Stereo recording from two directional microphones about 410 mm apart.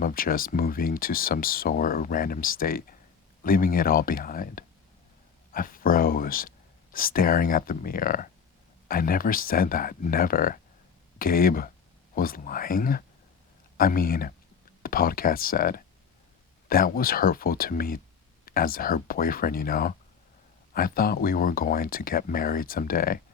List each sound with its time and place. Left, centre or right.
0.0 s speech: left